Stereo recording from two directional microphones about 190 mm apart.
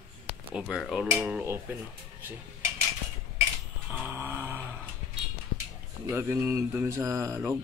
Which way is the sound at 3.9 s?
10° right (ahead or behind).